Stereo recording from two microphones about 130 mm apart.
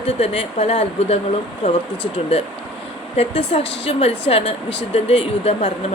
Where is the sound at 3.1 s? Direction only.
50° left (ahead or behind).